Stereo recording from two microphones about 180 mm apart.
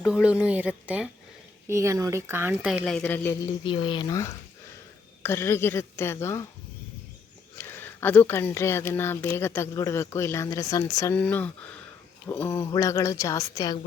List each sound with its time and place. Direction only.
0.0 s speech: 5° right (ahead or behind)
2.8 s speech: 5° left (ahead or behind)
3.6 s speech: 30° left (ahead or behind)
7.6 s speech: 10° left (ahead or behind)